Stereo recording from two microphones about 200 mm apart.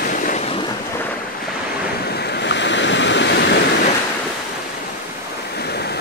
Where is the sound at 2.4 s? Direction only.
60° left (ahead or behind).